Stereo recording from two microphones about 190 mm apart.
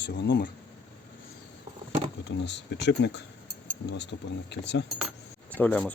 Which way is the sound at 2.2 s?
65° left (ahead or behind).